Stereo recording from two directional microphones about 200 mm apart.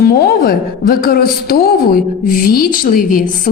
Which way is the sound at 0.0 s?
50° left (ahead or behind).